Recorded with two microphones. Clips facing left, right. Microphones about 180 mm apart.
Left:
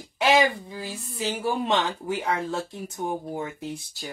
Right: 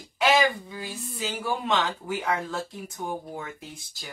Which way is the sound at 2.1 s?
30° left (ahead or behind).